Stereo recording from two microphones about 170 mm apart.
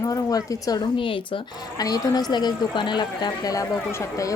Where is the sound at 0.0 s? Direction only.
20° left (ahead or behind).